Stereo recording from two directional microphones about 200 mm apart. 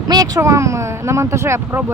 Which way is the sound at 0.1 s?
20° right (ahead or behind).